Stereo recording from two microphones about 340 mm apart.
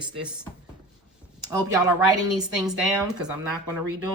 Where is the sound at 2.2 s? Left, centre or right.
Centre.